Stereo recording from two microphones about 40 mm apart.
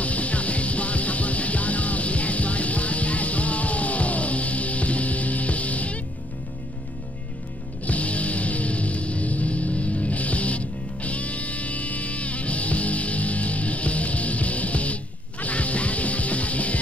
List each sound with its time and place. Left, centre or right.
0.0 s music: left
7.8 s music: left